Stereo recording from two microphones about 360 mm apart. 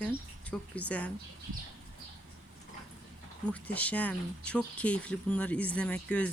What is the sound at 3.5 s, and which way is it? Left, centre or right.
Speech, centre.